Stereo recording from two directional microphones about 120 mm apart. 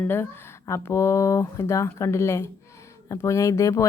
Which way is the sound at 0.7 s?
20° left (ahead or behind).